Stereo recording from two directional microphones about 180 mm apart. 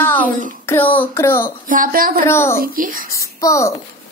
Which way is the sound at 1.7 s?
50° right (ahead or behind).